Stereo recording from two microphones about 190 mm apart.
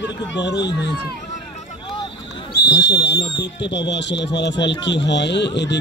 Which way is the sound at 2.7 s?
65° left (ahead or behind).